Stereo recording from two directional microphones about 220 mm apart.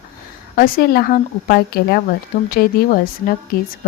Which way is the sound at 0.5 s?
40° left (ahead or behind).